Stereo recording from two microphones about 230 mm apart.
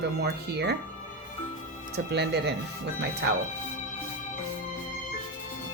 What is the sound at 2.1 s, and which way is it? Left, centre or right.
Speech, right.